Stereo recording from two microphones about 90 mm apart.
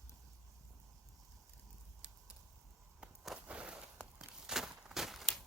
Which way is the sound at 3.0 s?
10° right (ahead or behind).